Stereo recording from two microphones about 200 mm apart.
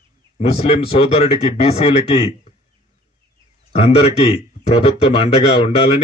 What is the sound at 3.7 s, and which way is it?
Speech, 30° left (ahead or behind).